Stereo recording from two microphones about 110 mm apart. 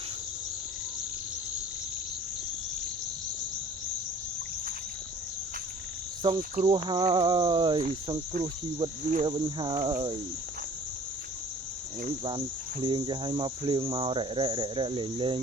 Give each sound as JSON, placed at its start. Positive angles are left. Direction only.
{"t": 6.2, "sound": "cricket", "side_deg": -45}
{"t": 12.8, "sound": "cricket", "side_deg": -45}